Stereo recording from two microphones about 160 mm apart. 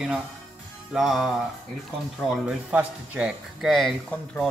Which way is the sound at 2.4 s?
5° right (ahead or behind).